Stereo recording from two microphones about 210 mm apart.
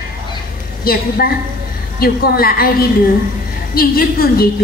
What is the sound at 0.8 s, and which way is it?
A woman's voice, 45° left (ahead or behind).